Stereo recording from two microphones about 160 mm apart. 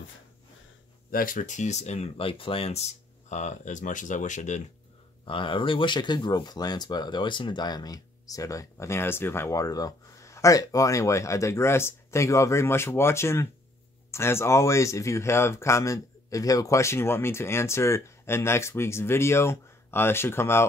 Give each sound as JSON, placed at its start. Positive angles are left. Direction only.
{"t": 1.1, "sound": "speech", "side_deg": 60}
{"t": 5.2, "sound": "speech", "side_deg": 30}